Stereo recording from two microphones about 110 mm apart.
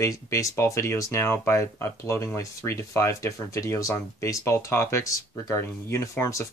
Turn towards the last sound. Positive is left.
turn(degrees=25)  # may be behind; listen again after turning